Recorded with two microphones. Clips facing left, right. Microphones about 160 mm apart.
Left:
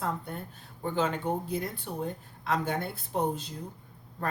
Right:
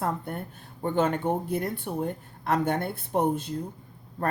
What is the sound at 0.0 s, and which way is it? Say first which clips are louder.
Speech: right 4 dB; 55° right (ahead or behind).